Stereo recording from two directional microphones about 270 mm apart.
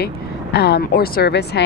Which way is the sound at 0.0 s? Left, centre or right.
Left.